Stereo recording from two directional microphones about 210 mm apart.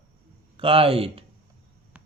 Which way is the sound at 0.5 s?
25° right (ahead or behind).